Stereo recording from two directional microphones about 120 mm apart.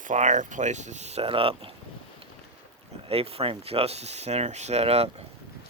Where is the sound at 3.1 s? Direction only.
55° right (ahead or behind).